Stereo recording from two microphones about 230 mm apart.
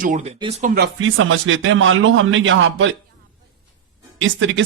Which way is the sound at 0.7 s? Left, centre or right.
Right.